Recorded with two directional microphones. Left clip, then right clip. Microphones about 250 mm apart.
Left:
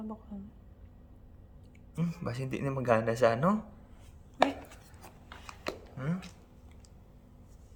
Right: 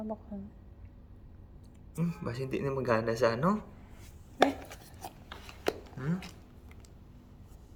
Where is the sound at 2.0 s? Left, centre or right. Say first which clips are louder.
Right 1 dB; left.